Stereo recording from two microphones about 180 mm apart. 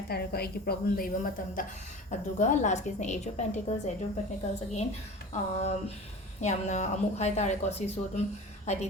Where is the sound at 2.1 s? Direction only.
40° left (ahead or behind).